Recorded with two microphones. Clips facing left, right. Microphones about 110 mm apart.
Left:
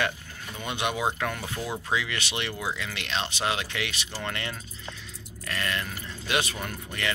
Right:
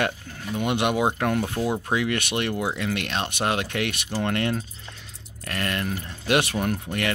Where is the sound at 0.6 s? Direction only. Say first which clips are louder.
Right 7 dB; 60° right (ahead or behind).